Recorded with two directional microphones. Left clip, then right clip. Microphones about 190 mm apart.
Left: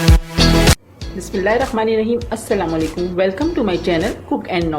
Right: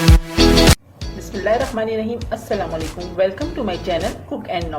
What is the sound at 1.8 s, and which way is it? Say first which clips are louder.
Speech: left 5 dB; 35° left (ahead or behind).